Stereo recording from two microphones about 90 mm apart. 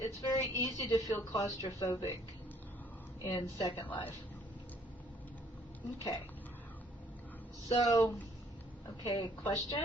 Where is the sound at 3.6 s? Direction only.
60° left (ahead or behind).